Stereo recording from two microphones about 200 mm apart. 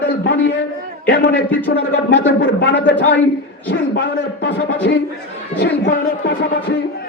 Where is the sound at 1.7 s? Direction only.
60° left (ahead or behind).